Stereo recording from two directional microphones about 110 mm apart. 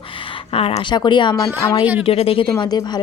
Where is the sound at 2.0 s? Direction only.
60° left (ahead or behind).